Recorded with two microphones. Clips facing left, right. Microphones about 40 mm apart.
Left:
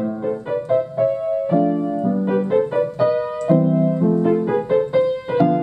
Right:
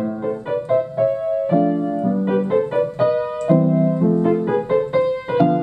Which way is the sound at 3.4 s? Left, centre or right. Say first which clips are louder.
Even; centre.